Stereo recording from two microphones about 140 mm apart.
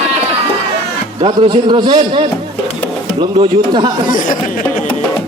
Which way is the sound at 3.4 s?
35° right (ahead or behind).